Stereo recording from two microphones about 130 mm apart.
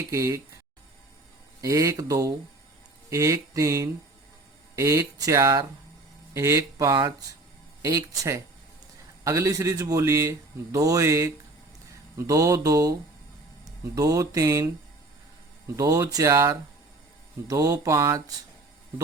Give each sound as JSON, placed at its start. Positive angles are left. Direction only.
{"t": 0.1, "sound": "speech", "side_deg": -25}
{"t": 1.6, "sound": "speech", "side_deg": -25}
{"t": 15.7, "sound": "speech", "side_deg": -25}